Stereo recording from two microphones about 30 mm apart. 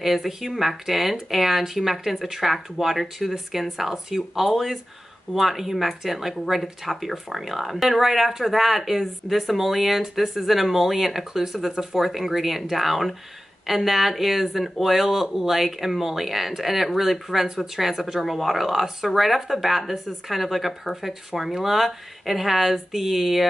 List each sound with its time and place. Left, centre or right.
0.0 s speech: centre
12.1 s speech: centre
20.9 s speech: centre